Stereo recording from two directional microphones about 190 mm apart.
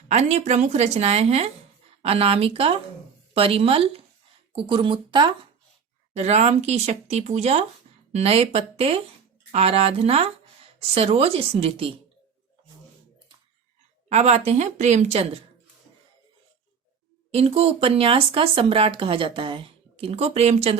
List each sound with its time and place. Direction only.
0.1 s speech: 35° right (ahead or behind)
6.1 s speech: 35° right (ahead or behind)
14.1 s speech: 35° right (ahead or behind)
17.3 s speech: 30° right (ahead or behind)